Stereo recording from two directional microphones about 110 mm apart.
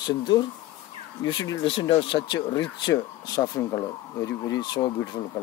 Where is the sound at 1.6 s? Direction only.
55° left (ahead or behind).